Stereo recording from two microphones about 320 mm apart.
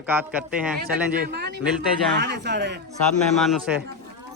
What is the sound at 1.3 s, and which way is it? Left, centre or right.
Speech, right.